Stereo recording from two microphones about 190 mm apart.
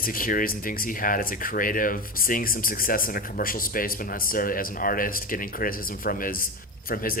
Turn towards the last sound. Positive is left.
turn(degrees=50)  # may be behind; listen again after turning